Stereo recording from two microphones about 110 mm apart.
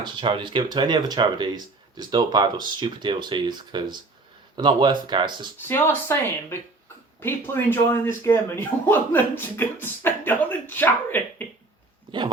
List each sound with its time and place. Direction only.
0.0 s speech: 50° right (ahead or behind)
5.5 s speech: 20° left (ahead or behind)